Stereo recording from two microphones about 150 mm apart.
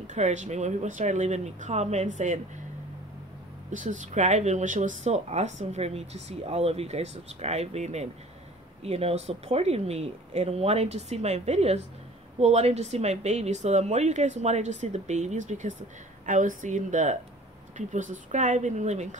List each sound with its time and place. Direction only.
0.0 s speech: 55° right (ahead or behind)
3.7 s speech: 55° right (ahead or behind)